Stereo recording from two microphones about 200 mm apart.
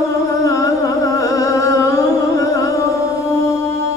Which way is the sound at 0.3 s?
15° left (ahead or behind).